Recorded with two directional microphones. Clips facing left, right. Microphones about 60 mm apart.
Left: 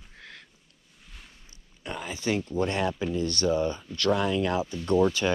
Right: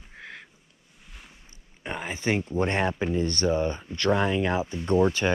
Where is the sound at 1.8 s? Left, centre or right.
Right.